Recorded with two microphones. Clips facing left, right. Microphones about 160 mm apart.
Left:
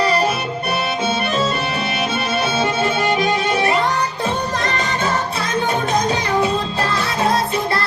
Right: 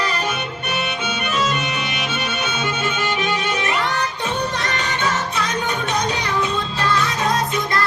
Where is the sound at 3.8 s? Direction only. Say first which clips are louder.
Left 3 dB; 90° right.